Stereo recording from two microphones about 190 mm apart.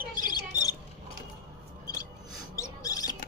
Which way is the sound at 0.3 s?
20° left (ahead or behind).